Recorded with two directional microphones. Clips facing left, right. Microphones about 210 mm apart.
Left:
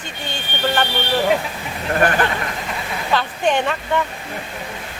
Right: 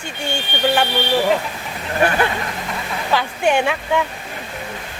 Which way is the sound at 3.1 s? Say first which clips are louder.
Right 1 dB; 10° right (ahead or behind).